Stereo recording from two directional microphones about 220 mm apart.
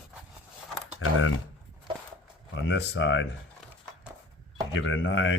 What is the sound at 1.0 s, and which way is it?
Speech, 65° left (ahead or behind).